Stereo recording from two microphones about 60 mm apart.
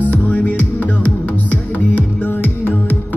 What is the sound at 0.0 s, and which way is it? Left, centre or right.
Music, left.